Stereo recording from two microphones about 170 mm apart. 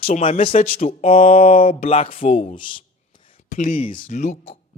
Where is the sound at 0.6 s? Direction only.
55° left (ahead or behind).